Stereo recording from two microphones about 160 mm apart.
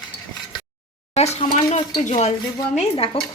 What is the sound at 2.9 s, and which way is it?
Speech, 35° left (ahead or behind).